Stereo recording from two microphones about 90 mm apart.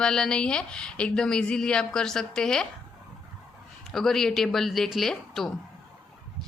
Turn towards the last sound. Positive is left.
turn(degrees=5)  # may be behind; listen again after turning